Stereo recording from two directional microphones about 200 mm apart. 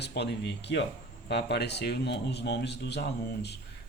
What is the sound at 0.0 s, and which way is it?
Speech, 55° left (ahead or behind).